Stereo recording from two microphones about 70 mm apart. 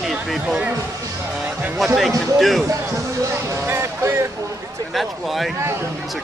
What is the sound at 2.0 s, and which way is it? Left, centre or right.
Speech, centre.